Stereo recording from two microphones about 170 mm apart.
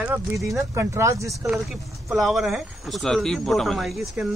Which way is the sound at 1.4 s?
Centre (ahead or behind).